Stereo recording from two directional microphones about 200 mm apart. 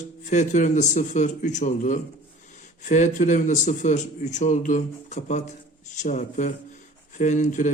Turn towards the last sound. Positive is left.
turn(degrees=40)  # may be behind; listen again after turning